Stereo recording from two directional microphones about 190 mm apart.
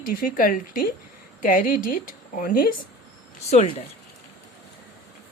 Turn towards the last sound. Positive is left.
turn(degrees=35)  # may be behind; listen again after turning